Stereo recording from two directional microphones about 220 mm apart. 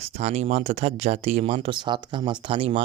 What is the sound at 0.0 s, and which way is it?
Speech, 30° right (ahead or behind).